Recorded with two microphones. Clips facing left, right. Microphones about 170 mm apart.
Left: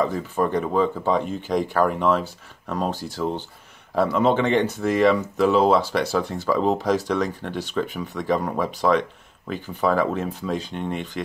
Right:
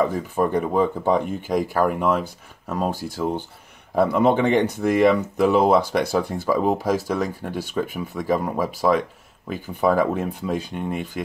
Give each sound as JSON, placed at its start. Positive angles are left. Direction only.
{"t": 0.0, "sound": "speech", "side_deg": -10}